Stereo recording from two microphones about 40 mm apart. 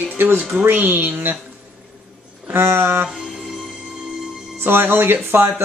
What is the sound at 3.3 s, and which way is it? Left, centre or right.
Music, centre.